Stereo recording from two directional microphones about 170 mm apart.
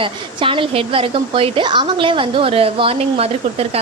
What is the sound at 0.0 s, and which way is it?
A woman's voice, 30° right (ahead or behind).